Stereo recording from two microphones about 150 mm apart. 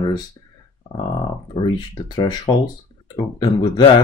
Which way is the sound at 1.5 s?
30° left (ahead or behind).